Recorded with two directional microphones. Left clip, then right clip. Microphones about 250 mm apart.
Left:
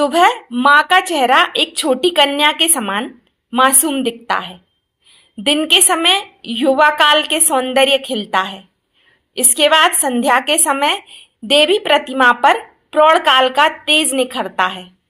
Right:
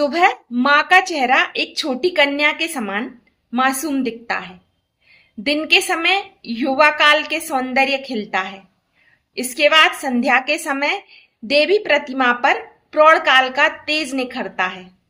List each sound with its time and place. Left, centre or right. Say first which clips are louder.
0.0 s a woman's voice: left 4 dB; centre